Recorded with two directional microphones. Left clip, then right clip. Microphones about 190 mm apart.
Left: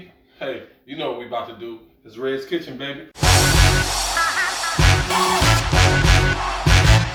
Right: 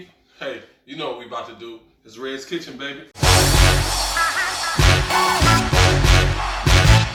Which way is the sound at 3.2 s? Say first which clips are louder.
Even; centre (ahead or behind).